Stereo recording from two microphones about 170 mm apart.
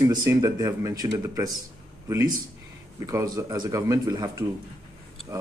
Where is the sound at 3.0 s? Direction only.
20° right (ahead or behind).